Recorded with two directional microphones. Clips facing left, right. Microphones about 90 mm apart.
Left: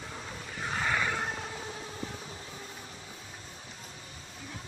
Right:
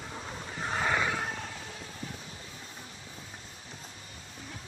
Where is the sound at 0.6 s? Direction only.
10° right (ahead or behind).